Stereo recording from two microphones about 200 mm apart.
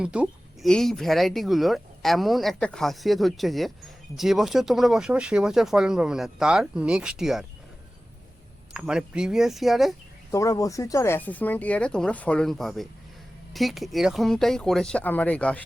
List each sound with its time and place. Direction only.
0.0 s speech: 5° right (ahead or behind)
8.7 s speech: 5° right (ahead or behind)
10.3 s speech: 15° left (ahead or behind)